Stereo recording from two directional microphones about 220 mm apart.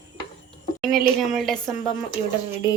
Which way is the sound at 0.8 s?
Centre (ahead or behind).